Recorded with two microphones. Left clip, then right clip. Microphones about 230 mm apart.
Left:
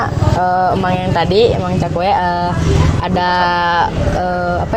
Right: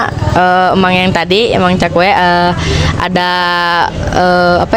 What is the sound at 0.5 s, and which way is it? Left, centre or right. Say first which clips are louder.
Speech: right 5 dB; right.